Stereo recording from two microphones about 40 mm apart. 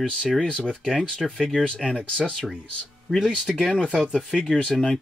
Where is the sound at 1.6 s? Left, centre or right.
Left.